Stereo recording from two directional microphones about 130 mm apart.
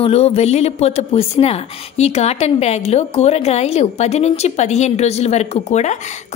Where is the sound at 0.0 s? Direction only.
50° left (ahead or behind).